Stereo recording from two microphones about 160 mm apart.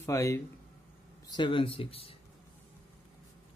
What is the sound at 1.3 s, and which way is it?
Speech, 30° left (ahead or behind).